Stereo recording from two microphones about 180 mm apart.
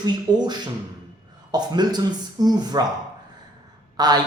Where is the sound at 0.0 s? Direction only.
25° right (ahead or behind).